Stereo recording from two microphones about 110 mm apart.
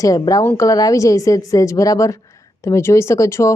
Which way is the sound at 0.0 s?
35° left (ahead or behind).